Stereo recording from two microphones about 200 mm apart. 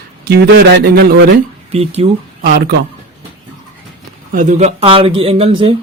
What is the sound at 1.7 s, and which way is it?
Speech, 30° right (ahead or behind).